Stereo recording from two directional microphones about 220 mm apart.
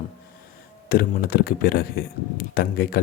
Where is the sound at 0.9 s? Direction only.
45° left (ahead or behind).